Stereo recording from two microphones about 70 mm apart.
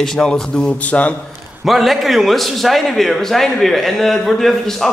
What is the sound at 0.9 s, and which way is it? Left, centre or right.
Speech, left.